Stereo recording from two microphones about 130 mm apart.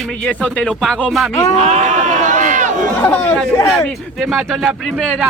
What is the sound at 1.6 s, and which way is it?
Run, 60° right (ahead or behind).